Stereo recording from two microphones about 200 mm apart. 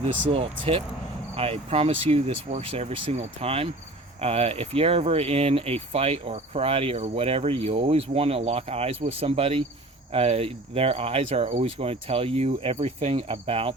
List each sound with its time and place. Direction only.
0.0 s speech: 30° right (ahead or behind)